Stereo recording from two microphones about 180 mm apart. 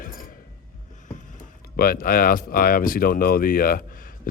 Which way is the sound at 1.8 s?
55° left (ahead or behind).